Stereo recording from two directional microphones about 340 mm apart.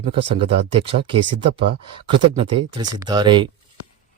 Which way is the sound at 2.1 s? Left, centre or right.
Centre.